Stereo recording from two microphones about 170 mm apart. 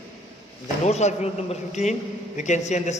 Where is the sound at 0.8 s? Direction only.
40° left (ahead or behind).